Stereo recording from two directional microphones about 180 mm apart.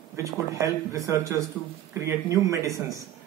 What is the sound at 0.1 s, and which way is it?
Speech, 15° right (ahead or behind).